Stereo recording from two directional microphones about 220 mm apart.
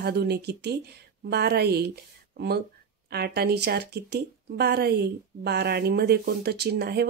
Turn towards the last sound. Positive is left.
turn(degrees=-45)  # may be behind; listen again after turning